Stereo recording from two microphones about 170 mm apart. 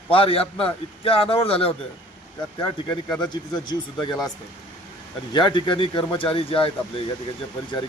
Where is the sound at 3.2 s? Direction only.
25° left (ahead or behind).